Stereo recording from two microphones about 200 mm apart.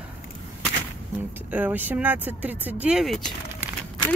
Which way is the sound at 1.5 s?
10° right (ahead or behind).